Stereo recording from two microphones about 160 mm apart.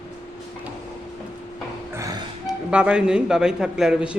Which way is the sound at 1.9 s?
20° right (ahead or behind).